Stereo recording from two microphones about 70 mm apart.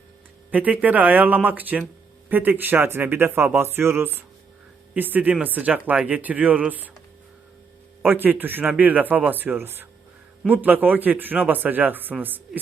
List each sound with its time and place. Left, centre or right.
0.5 s speech: right
8.0 s speech: right